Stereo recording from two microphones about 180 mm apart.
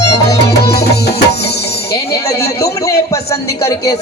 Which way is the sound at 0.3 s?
65° left (ahead or behind).